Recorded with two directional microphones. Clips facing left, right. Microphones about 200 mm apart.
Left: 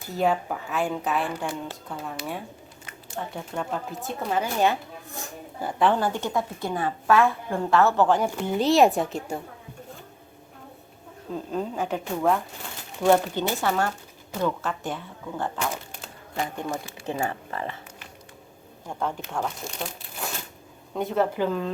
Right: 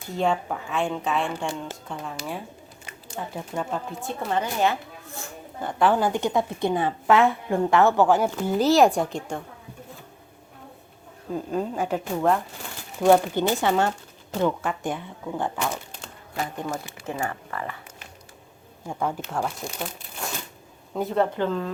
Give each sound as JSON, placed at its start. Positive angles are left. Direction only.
{"t": 0.2, "sound": "a woman's voice", "side_deg": 5}
{"t": 4.6, "sound": "speech", "side_deg": 15}
{"t": 5.6, "sound": "a woman's voice", "side_deg": 0}
{"t": 6.0, "sound": "a woman's voice", "side_deg": -15}
{"t": 11.3, "sound": "a woman's voice", "side_deg": -5}
{"t": 13.0, "sound": "a woman's voice", "side_deg": -15}
{"t": 16.0, "sound": "a sound", "side_deg": 0}
{"t": 17.1, "sound": "speech", "side_deg": 20}
{"t": 18.9, "sound": "a woman's voice", "side_deg": -10}
{"t": 21.3, "sound": "speech", "side_deg": 10}